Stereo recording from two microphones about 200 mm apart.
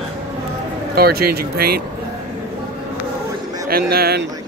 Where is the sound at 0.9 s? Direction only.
50° right (ahead or behind).